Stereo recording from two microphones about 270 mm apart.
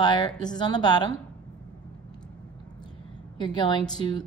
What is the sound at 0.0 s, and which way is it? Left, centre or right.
A woman's voice, centre.